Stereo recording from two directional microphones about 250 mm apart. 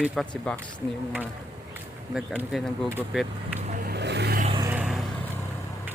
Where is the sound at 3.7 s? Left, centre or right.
Right.